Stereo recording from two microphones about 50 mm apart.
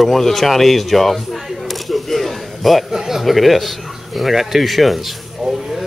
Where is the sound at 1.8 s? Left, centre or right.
Centre.